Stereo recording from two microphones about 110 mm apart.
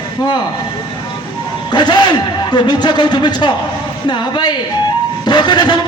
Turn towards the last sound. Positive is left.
turn(degrees=40)  # may be behind; listen again after turning